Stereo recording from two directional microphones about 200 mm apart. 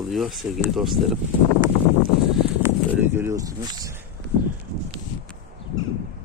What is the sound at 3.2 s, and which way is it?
Speech, 15° right (ahead or behind).